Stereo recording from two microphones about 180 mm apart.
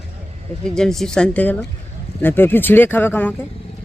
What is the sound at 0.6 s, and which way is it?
Speech, 5° left (ahead or behind).